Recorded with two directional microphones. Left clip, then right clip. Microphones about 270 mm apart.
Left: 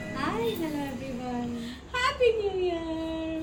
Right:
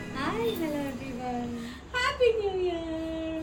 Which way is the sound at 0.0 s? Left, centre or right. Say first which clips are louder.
Even; centre.